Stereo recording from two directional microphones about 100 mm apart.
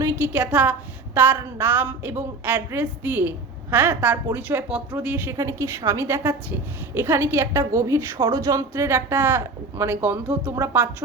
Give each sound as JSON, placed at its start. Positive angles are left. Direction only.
{"t": 0.2, "sound": "a woman's voice", "side_deg": -15}